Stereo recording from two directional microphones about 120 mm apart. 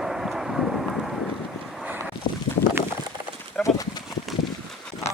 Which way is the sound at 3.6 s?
5° left (ahead or behind).